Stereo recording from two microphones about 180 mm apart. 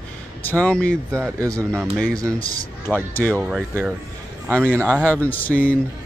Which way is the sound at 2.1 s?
20° right (ahead or behind).